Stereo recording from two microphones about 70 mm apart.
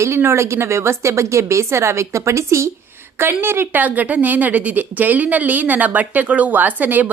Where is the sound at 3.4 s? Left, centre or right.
Right.